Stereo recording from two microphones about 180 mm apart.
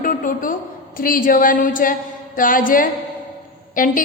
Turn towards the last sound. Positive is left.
turn(degrees=50)  # may be behind; listen again after turning